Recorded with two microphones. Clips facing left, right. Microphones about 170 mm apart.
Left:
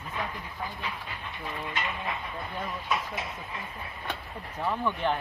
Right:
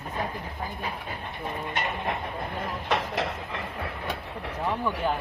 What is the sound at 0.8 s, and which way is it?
Speech, 50° right (ahead or behind).